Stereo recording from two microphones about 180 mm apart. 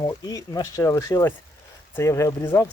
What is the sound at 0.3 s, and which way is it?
Speech, 20° left (ahead or behind).